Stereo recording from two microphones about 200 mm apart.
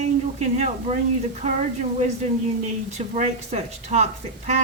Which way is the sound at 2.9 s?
35° right (ahead or behind).